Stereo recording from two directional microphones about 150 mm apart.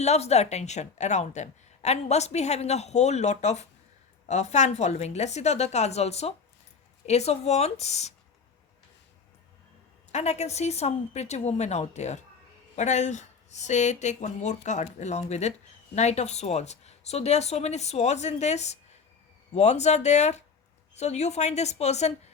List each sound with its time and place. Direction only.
0.0 s a woman's voice: 45° left (ahead or behind)
10.1 s a woman's voice: 45° left (ahead or behind)